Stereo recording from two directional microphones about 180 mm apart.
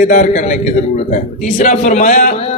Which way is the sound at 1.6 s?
45° left (ahead or behind).